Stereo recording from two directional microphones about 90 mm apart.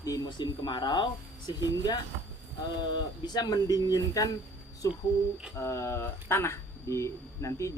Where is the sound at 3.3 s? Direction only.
50° left (ahead or behind).